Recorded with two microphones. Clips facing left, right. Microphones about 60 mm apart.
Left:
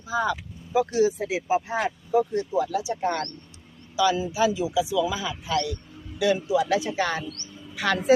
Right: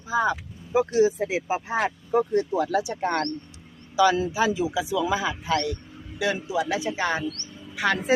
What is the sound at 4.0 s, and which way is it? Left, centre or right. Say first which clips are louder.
A man's voice: right 1 dB; right.